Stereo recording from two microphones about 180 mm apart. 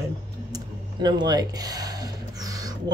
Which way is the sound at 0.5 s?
20° right (ahead or behind).